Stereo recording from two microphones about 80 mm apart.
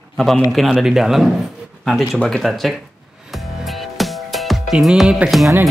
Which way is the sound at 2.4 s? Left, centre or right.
Centre.